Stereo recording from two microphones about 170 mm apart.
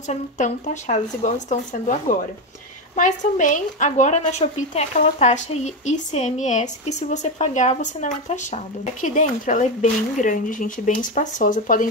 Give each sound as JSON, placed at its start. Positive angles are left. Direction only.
{"t": 0.1, "sound": "a woman's voice", "side_deg": 45}